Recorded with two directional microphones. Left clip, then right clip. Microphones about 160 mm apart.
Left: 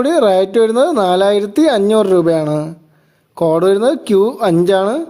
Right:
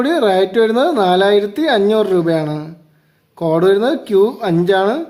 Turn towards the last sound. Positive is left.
turn(degrees=40)  # may be behind; listen again after turning